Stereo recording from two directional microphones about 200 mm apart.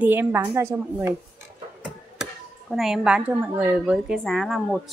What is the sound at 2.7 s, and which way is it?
A woman's voice, centre (ahead or behind).